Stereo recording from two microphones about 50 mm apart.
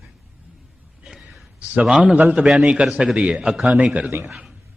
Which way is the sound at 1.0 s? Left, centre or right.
Centre.